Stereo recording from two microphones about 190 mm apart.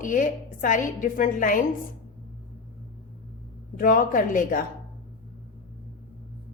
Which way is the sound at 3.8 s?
45° left (ahead or behind).